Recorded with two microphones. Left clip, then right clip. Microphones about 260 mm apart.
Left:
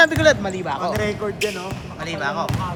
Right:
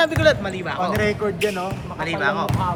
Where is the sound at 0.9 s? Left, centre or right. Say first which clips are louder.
Right 2 dB; right.